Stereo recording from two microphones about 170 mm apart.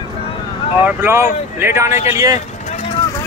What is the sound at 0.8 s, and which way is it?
Speech, 15° right (ahead or behind).